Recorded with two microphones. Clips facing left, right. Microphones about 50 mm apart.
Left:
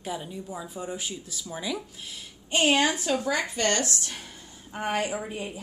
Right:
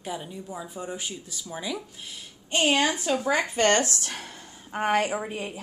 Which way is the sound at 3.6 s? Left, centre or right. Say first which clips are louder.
Right 4 dB; right.